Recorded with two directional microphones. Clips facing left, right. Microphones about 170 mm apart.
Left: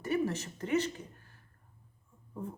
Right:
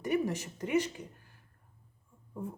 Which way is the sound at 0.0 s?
15° right (ahead or behind).